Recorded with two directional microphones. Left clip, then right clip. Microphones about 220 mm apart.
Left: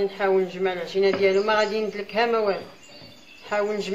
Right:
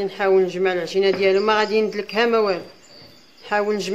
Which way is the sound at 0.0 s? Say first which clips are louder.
Right 4 dB; 45° right (ahead or behind).